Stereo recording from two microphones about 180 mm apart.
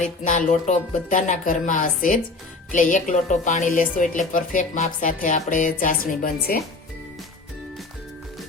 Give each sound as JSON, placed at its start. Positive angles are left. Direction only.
{"t": 0.3, "sound": "a woman's voice", "side_deg": 45}